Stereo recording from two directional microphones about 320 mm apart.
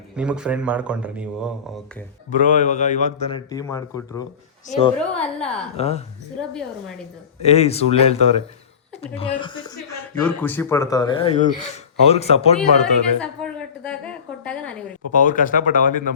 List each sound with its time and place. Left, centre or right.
0.2 s speech: centre
2.3 s a man's voice: left
6.4 s speech: centre
7.4 s a man's voice: centre
12.5 s a sound: centre
15.1 s a man's voice: left